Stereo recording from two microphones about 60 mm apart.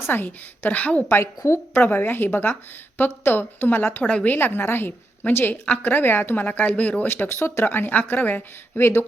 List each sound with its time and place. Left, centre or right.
0.1 s a woman's voice: left
1.4 s a woman's voice: left
1.9 s speech: left
4.0 s a woman's voice: centre
4.3 s speech: left
5.6 s a woman's voice: left
7.1 s speech: left